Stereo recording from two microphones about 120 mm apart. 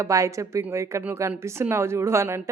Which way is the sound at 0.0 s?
25° right (ahead or behind).